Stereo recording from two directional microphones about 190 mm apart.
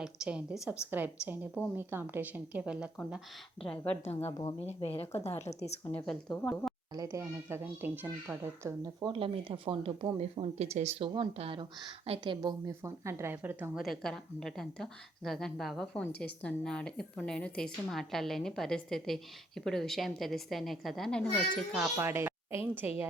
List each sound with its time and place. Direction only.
0.0 s a woman's voice: 5° right (ahead or behind)
3.6 s a woman's voice: 5° left (ahead or behind)
4.4 s a woman's voice: 25° left (ahead or behind)
6.1 s a woman's voice: 5° left (ahead or behind)
6.9 s a woman's voice: 15° right (ahead or behind); by 21.8 s centre (ahead or behind)
21.9 s a woman's voice: 10° right (ahead or behind)